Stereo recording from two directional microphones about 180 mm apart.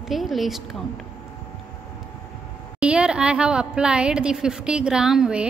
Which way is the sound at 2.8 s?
5° right (ahead or behind).